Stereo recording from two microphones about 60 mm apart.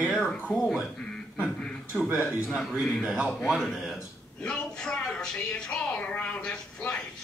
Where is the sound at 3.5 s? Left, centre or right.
Centre.